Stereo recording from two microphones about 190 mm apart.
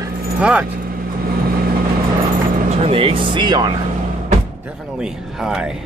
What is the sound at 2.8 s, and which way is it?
Speech, 25° right (ahead or behind).